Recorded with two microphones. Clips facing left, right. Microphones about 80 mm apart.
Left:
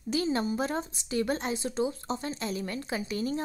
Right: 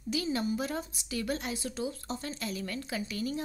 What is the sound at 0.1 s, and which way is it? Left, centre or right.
A woman's voice, left.